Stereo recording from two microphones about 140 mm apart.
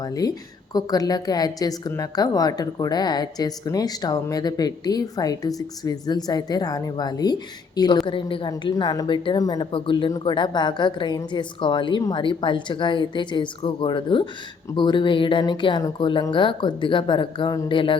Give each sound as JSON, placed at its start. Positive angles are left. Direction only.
{"t": 0.0, "sound": "a woman's voice", "side_deg": 25}